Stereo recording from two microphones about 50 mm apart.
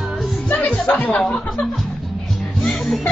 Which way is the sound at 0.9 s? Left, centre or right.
Left.